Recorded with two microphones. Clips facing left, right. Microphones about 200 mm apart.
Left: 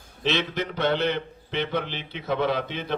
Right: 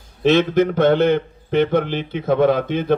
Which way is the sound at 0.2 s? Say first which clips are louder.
Right 12 dB; 50° right (ahead or behind).